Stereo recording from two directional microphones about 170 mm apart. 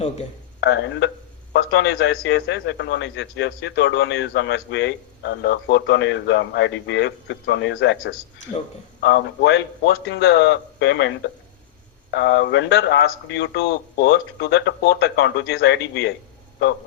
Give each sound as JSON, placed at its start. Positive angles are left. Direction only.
{"t": 0.6, "sound": "a man's voice", "side_deg": 90}
{"t": 9.0, "sound": "a man's voice", "side_deg": 80}
{"t": 12.1, "sound": "a man's voice", "side_deg": 85}